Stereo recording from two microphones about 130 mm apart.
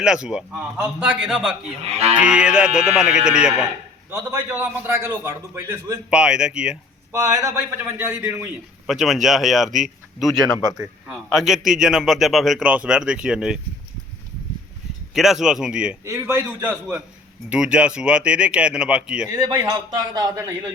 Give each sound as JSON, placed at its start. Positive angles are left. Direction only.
{"t": 0.0, "sound": "speech", "side_deg": -5}
{"t": 1.8, "sound": "moo", "side_deg": -50}
{"t": 2.1, "sound": "speech", "side_deg": -10}
{"t": 4.1, "sound": "a man's voice", "side_deg": -20}
{"t": 6.1, "sound": "speech", "side_deg": -5}
{"t": 7.1, "sound": "a man's voice", "side_deg": -25}
{"t": 8.9, "sound": "speech", "side_deg": 0}
{"t": 15.1, "sound": "speech", "side_deg": 0}
{"t": 16.0, "sound": "a man's voice", "side_deg": -20}
{"t": 19.3, "sound": "speech", "side_deg": -30}